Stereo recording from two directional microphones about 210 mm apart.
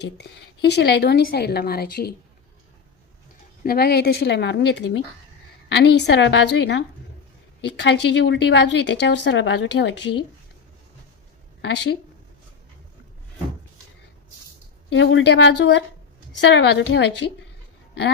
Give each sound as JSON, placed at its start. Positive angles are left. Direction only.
{"t": 0.0, "sound": "a woman's voice", "side_deg": 55}
{"t": 3.6, "sound": "a woman's voice", "side_deg": 45}
{"t": 11.6, "sound": "a woman's voice", "side_deg": 55}
{"t": 14.8, "sound": "a woman's voice", "side_deg": 60}